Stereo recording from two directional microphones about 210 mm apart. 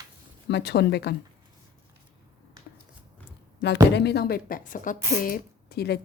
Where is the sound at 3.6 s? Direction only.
55° left (ahead or behind).